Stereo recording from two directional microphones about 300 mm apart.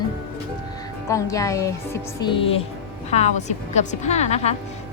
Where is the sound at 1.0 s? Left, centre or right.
Centre.